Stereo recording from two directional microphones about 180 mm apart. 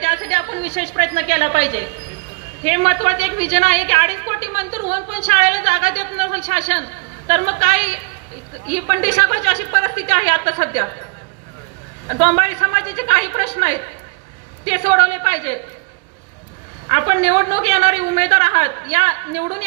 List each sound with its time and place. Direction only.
0.0 s a woman's voice: 40° right (ahead or behind)
12.0 s a woman's voice: 40° right (ahead or behind)
16.9 s a woman's voice: 40° right (ahead or behind)